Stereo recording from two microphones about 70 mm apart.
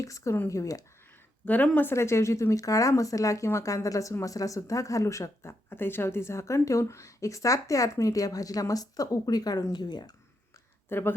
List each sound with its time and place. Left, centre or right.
0.0 s speech: left
1.5 s speech: left
1.9 s speech: left
9.7 s speech: left
10.8 s speech: left